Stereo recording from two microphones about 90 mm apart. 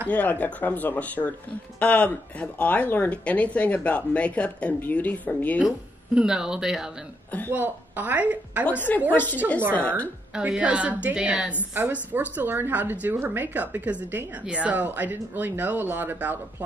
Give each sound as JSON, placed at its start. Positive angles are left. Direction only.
{"t": 0.1, "sound": "speech", "side_deg": 20}
{"t": 6.1, "sound": "a woman's voice", "side_deg": -10}
{"t": 7.5, "sound": "a woman's voice", "side_deg": -20}
{"t": 8.6, "sound": "a woman's voice", "side_deg": 20}
{"t": 10.3, "sound": "a woman's voice", "side_deg": -10}